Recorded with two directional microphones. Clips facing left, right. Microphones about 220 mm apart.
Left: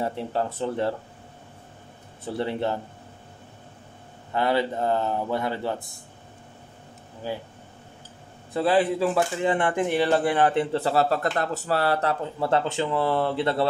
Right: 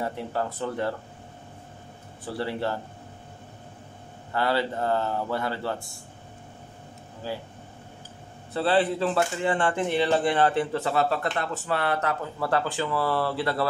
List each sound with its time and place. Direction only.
0.0 s speech: 25° left (ahead or behind)
2.2 s speech: 20° left (ahead or behind)
4.3 s speech: 20° left (ahead or behind)
7.2 s speech: 20° left (ahead or behind)
8.5 s speech: 15° left (ahead or behind)
10.6 s speech: 30° left (ahead or behind)